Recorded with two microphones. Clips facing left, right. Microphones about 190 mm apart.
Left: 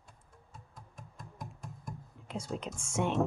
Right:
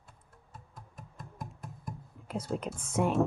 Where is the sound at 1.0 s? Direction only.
5° right (ahead or behind).